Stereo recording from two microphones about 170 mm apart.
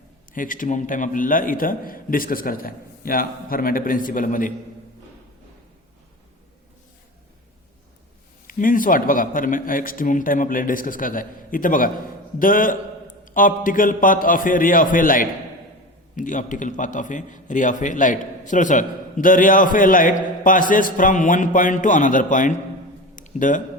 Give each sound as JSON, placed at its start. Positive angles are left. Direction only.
{"t": 0.3, "sound": "a man's voice", "side_deg": 50}
{"t": 8.4, "sound": "a man's voice", "side_deg": 55}
{"t": 23.1, "sound": "a sound", "side_deg": 50}